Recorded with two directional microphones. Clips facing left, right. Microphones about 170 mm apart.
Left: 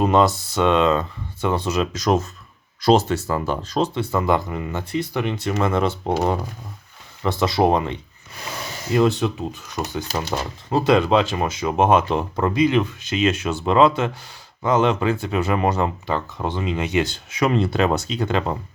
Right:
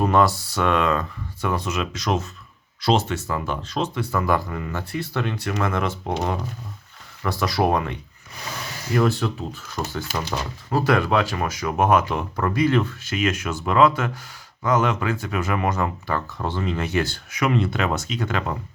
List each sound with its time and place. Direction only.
0.0 s speech: 20° left (ahead or behind)
7.2 s speech: 25° left (ahead or behind)
17.4 s speech: 35° left (ahead or behind)